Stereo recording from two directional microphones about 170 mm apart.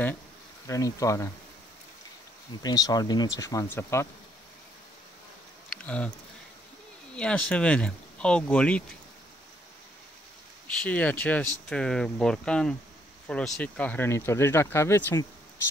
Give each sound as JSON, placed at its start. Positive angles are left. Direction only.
{"t": 0.7, "sound": "speech", "side_deg": 20}
{"t": 2.6, "sound": "speech", "side_deg": 20}
{"t": 5.7, "sound": "a sound", "side_deg": 5}
{"t": 7.2, "sound": "speech", "side_deg": 5}
{"t": 10.8, "sound": "speech", "side_deg": 10}